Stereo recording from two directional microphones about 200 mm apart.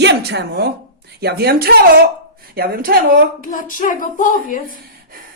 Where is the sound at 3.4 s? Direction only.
40° left (ahead or behind).